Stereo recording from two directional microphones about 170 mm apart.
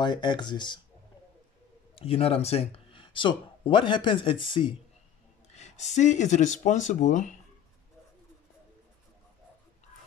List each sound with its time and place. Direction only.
0.0 s speech: 25° left (ahead or behind)
2.0 s speech: 35° left (ahead or behind)
5.5 s speech: 40° left (ahead or behind)